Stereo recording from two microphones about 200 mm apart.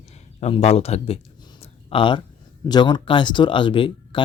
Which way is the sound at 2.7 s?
20° left (ahead or behind).